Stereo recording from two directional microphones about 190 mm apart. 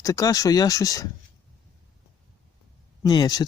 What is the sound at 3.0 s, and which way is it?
Speech, 20° left (ahead or behind).